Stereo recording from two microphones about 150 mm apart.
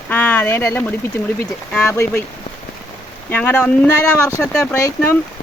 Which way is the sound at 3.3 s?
10° left (ahead or behind).